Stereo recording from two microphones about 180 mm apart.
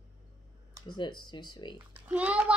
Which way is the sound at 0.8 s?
25° left (ahead or behind).